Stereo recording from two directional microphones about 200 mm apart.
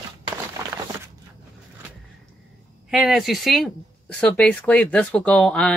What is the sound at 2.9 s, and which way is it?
Speech, centre (ahead or behind).